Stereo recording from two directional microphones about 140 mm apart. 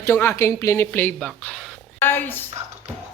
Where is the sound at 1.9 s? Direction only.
15° left (ahead or behind).